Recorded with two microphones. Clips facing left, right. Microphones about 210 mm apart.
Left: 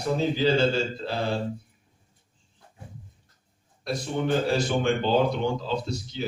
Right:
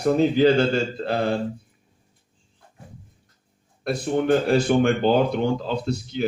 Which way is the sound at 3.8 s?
55° right (ahead or behind).